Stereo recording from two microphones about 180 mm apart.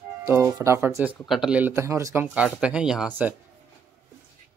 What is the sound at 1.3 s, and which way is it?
Speech, 5° right (ahead or behind).